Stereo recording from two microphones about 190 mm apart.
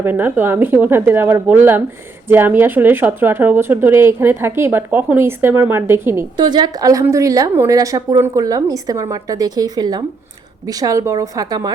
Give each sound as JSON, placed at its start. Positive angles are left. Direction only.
{"t": 0.0, "sound": "speech", "side_deg": -10}
{"t": 6.3, "sound": "a woman's voice", "side_deg": -20}